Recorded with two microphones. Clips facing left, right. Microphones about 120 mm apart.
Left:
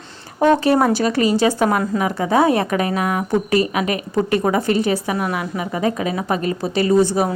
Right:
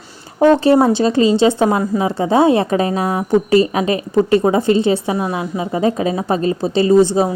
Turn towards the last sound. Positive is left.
turn(degrees=-25)  # may be behind; listen again after turning